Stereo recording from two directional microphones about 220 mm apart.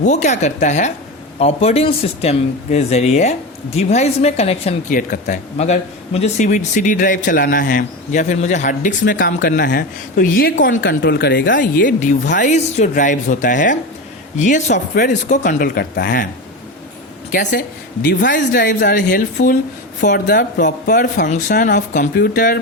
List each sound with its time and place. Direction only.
0.0 s speech: 30° left (ahead or behind)
10.7 s speech: 55° left (ahead or behind)
18.1 s speech: 50° left (ahead or behind)
20.9 s speech: 35° left (ahead or behind)